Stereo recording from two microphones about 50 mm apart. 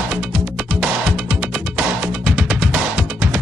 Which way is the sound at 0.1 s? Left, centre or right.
Right.